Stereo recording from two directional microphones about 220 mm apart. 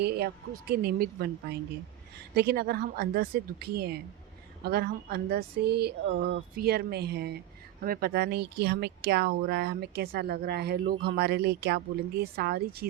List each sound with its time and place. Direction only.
0.7 s speech: 45° right (ahead or behind)